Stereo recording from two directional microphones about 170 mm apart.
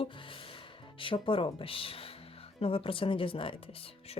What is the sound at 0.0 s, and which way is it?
Music, 30° left (ahead or behind).